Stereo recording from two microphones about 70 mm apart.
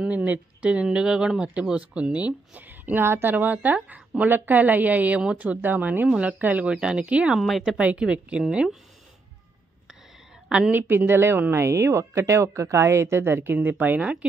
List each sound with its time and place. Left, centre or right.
0.0 s speech: right
7.3 s speech: centre
7.6 s speech: centre
10.7 s speech: right